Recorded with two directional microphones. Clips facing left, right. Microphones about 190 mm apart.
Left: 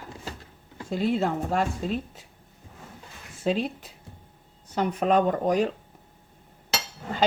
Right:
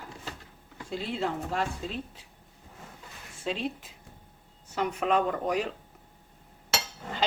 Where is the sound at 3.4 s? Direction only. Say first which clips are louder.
Left 6 dB; 40° left (ahead or behind).